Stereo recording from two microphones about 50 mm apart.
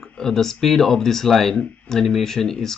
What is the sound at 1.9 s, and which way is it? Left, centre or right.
Speech, centre.